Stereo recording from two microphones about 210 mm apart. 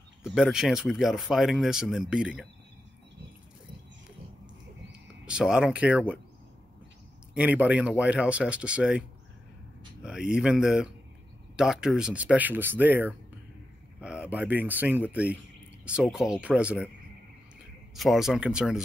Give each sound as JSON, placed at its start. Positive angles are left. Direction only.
{"t": 0.2, "sound": "speech", "side_deg": -5}
{"t": 5.2, "sound": "speech", "side_deg": -5}
{"t": 7.3, "sound": "speech", "side_deg": -5}
{"t": 10.0, "sound": "speech", "side_deg": -5}
{"t": 17.9, "sound": "speech", "side_deg": 0}